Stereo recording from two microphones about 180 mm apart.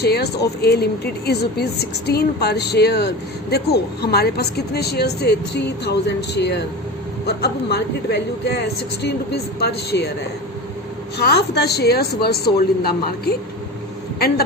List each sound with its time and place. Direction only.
0.0 s speech: 65° left (ahead or behind)
11.2 s a woman's voice: 65° left (ahead or behind)